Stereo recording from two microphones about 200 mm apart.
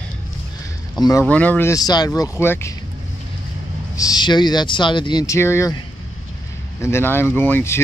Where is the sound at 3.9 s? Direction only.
20° left (ahead or behind).